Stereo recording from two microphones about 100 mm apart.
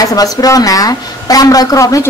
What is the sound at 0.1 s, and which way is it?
A woman's voice, 35° left (ahead or behind).